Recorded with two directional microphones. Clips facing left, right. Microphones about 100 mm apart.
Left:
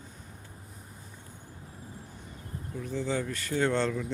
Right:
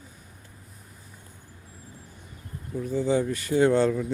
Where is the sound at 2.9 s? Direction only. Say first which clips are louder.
Right 7 dB; 15° right (ahead or behind).